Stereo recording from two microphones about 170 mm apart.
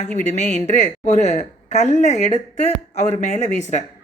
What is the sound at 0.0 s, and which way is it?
Speech, 45° left (ahead or behind).